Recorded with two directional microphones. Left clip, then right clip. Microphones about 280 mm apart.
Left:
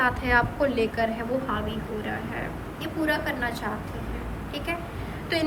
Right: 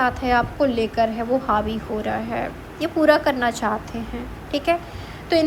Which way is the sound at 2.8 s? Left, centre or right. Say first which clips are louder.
Right 10 dB; right.